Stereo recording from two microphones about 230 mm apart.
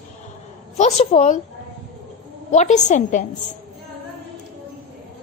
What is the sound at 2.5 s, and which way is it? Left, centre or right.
Speech, left.